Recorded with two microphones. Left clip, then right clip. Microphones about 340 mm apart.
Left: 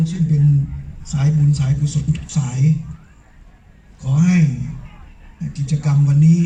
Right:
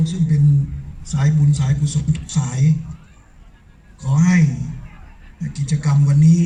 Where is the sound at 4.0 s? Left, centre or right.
Right.